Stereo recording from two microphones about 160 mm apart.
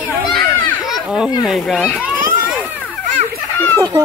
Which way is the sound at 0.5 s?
10° left (ahead or behind).